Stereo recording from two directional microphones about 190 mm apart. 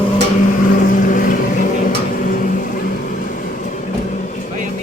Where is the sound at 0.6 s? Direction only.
45° left (ahead or behind).